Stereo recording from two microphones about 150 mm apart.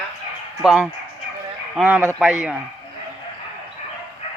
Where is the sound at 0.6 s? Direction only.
5° right (ahead or behind).